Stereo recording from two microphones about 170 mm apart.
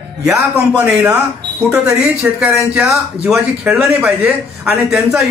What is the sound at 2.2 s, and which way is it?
Speech, 10° right (ahead or behind).